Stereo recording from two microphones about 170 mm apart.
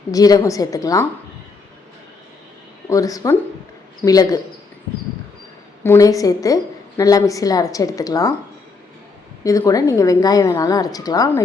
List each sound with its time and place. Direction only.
0.1 s a woman's voice: 20° left (ahead or behind)
2.9 s a woman's voice: 20° left (ahead or behind)
5.8 s a woman's voice: 20° left (ahead or behind)
9.4 s a woman's voice: 20° left (ahead or behind)